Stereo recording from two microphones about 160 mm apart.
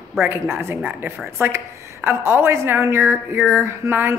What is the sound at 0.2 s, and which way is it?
A woman's voice, 15° right (ahead or behind).